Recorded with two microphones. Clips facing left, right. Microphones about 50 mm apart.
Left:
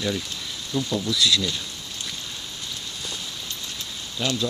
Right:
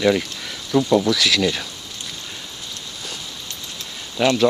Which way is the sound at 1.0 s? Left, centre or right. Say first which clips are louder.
Right 4 dB; right.